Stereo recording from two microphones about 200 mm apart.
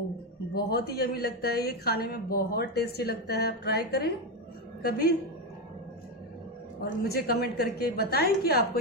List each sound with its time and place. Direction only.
0.6 s speech: 55° left (ahead or behind)
6.8 s speech: 50° left (ahead or behind)